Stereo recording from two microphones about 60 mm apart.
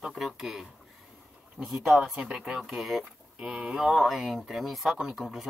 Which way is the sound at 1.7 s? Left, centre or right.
Centre.